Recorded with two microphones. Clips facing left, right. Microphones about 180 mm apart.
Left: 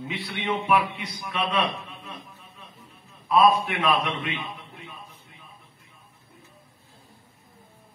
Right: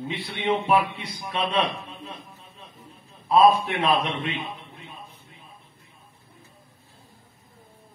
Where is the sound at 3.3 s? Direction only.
30° right (ahead or behind).